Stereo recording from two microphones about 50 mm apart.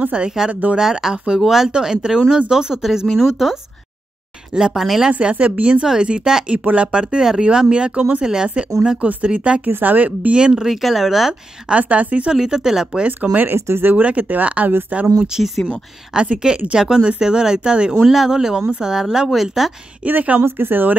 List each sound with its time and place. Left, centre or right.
0.1 s speech: right
0.7 s speech: centre
4.6 s speech: centre
5.2 s speech: right
9.7 s speech: right
10.3 s speech: centre
11.7 s speech: right
12.3 s speech: centre
13.0 s speech: right
13.6 s speech: right
14.0 s speech: right
15.3 s speech: centre
20.1 s speech: right
20.4 s speech: right